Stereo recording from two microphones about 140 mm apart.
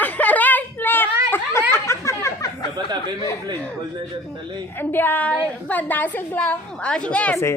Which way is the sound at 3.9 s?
35° right (ahead or behind).